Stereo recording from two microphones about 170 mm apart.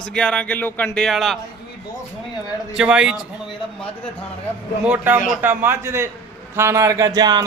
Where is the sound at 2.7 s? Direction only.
5° right (ahead or behind).